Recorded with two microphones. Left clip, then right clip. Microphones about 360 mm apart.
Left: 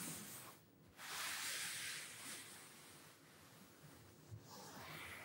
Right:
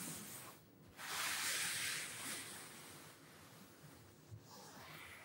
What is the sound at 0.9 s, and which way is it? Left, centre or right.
Vehicle, right.